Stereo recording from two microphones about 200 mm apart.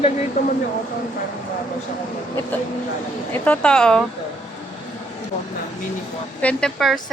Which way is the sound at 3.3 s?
5° left (ahead or behind).